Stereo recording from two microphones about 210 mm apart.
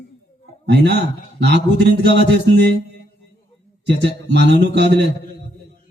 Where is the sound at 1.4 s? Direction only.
55° right (ahead or behind).